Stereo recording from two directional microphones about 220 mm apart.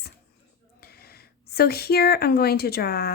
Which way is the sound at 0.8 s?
45° left (ahead or behind).